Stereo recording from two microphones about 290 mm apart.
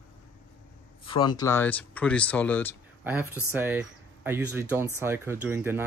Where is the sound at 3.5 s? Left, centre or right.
Centre.